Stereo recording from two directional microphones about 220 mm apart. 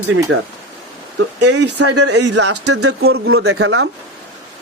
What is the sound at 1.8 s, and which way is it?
Speech, 90° right.